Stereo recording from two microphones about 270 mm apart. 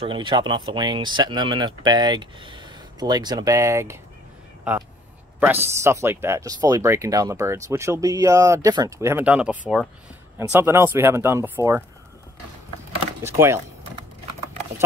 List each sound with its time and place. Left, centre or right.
0.0 s speech: centre
5.4 s speech: centre
13.2 s power windows: centre